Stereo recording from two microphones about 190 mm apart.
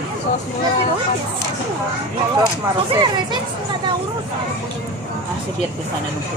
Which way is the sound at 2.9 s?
25° right (ahead or behind).